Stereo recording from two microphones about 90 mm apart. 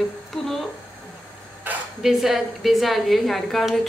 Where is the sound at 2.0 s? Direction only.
5° right (ahead or behind).